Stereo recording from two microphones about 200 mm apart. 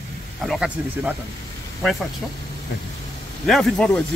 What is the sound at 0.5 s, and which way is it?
Speech, 5° right (ahead or behind).